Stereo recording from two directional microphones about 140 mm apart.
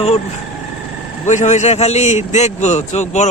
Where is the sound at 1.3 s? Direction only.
60° left (ahead or behind).